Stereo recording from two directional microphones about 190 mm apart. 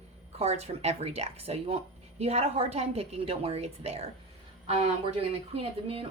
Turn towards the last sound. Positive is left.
turn(degrees=-30)  # may be behind; listen again after turning